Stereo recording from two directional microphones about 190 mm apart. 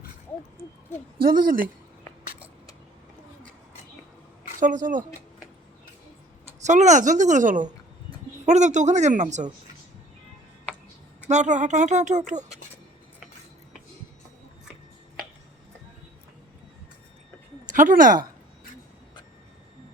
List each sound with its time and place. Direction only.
1.2 s speech: 50° right (ahead or behind)
4.6 s speech: 40° right (ahead or behind)
6.7 s speech: 40° right (ahead or behind)
11.3 s speech: 40° right (ahead or behind)
17.7 s speech: 45° right (ahead or behind)